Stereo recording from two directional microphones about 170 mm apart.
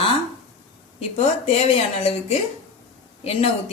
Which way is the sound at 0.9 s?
40° left (ahead or behind).